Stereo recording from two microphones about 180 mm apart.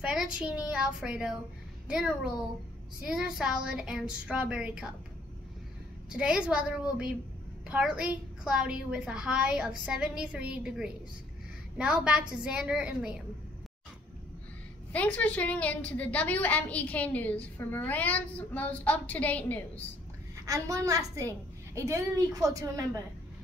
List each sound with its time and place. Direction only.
0.0 s a woman's voice: 5° right (ahead or behind)
6.0 s a woman's voice: 5° right (ahead or behind)
14.9 s a woman's voice: 10° left (ahead or behind)
20.4 s a woman's voice: 15° right (ahead or behind)